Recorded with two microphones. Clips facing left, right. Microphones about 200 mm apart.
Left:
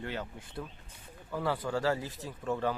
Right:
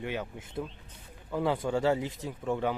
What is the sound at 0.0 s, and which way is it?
Speech, 15° right (ahead or behind).